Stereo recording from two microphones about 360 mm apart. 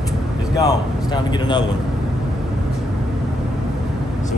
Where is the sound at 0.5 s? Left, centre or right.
Centre.